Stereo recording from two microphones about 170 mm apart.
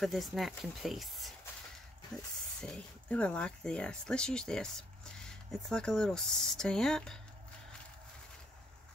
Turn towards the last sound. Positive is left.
turn(degrees=5)  # may be behind; listen again after turning